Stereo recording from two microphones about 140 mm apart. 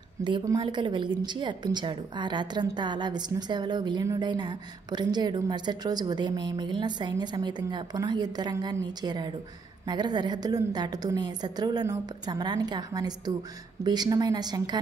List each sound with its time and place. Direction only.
0.2 s a woman's voice: 35° right (ahead or behind)